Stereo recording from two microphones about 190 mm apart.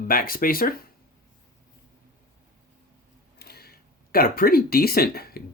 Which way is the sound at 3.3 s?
55° left (ahead or behind).